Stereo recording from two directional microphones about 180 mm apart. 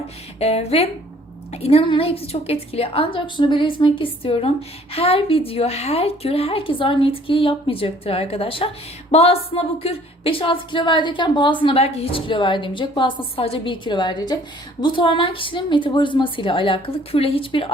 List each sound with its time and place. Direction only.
0.3 s a woman's voice: 35° left (ahead or behind)